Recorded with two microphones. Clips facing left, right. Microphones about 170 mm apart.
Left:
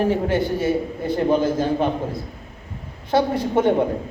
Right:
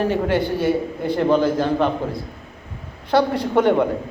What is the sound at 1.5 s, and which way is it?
Speech, 65° right (ahead or behind).